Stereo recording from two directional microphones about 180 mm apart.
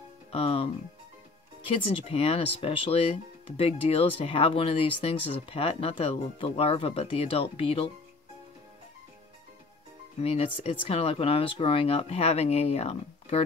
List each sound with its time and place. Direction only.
0.3 s speech: 30° left (ahead or behind)
1.7 s speech: 30° left (ahead or behind)
10.2 s speech: 35° left (ahead or behind)